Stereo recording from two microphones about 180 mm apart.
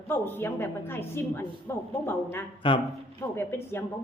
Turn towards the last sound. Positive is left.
turn(degrees=10)  # may be behind; listen again after turning